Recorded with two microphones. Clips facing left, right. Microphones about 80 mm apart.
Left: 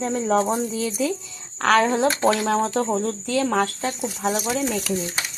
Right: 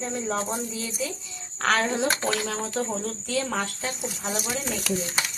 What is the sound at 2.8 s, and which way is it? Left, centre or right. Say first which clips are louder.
Speech: left 7 dB; left.